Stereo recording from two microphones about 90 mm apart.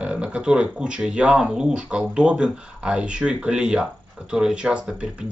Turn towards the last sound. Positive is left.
turn(degrees=-10)  # may be behind; listen again after turning